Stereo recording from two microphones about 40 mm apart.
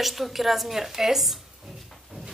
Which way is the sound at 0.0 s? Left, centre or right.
Centre.